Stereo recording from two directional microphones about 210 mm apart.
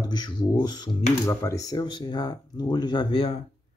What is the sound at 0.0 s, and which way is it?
Speech, 20° left (ahead or behind).